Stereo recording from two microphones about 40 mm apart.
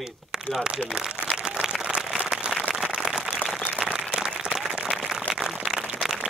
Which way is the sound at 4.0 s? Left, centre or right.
Centre.